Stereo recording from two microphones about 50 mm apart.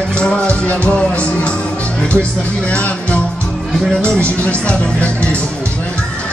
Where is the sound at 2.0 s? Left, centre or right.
Left.